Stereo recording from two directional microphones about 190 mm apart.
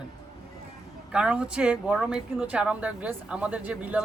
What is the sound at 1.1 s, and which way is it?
Speech, 5° right (ahead or behind).